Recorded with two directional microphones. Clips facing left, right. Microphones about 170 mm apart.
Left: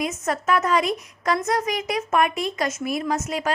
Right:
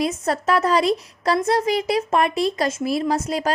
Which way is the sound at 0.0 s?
35° right (ahead or behind).